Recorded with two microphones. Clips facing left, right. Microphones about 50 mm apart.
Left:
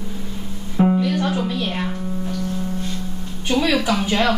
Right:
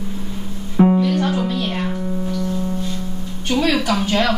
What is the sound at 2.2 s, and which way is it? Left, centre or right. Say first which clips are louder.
Music: right 2 dB; right.